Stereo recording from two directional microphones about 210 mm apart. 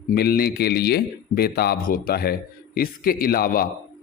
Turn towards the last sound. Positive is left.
turn(degrees=45)  # may be behind; listen again after turning